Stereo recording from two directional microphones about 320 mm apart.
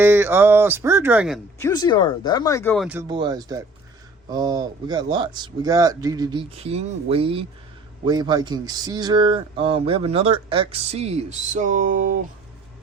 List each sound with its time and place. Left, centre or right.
0.0 s speech: centre
1.5 s speech: centre; by 12.1 s right